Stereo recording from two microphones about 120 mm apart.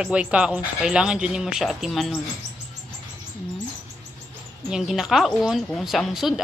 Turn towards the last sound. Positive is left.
turn(degrees=0)  # may be behind; listen again after turning